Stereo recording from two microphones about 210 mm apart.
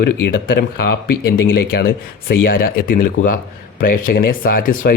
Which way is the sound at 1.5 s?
50° left (ahead or behind).